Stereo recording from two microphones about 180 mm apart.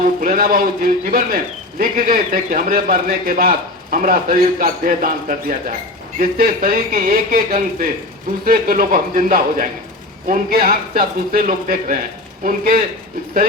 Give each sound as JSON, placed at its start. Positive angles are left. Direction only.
{"t": 0.2, "sound": "a man's voice", "side_deg": -50}